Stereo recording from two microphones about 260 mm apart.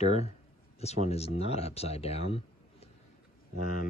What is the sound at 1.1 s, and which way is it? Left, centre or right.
Speech, left.